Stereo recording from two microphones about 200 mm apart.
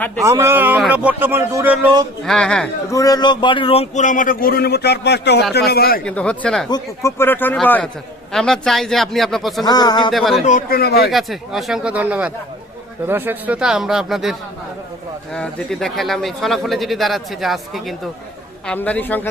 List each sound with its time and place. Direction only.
0.3 s speech: 15° right (ahead or behind)
2.2 s speech: 5° left (ahead or behind)
2.9 s a man's voice: 15° left (ahead or behind); by 6.0 s 50° left (ahead or behind)
6.1 s speech: 5° left (ahead or behind)
6.7 s a man's voice: 15° left (ahead or behind); by 9.6 s centre (ahead or behind)
9.6 s speech: 20° left (ahead or behind)
10.1 s speech: centre (ahead or behind)
10.3 s speech: 40° left (ahead or behind); by 11.1 s 55° left (ahead or behind)
11.1 s a man's voice: centre (ahead or behind)